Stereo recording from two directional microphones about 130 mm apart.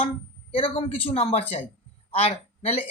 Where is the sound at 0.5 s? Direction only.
45° left (ahead or behind).